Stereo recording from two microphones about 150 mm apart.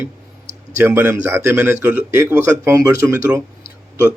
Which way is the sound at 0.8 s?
15° right (ahead or behind).